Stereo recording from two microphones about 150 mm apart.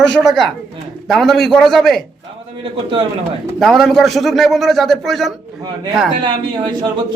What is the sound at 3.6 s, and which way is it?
A man's voice, centre (ahead or behind).